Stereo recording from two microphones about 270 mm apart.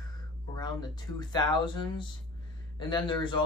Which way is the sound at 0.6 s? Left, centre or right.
Centre.